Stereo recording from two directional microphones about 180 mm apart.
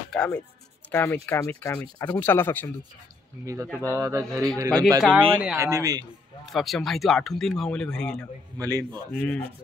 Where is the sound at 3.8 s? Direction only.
15° right (ahead or behind).